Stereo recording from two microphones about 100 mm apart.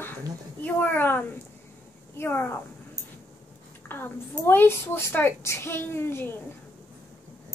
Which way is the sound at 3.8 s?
20° left (ahead or behind).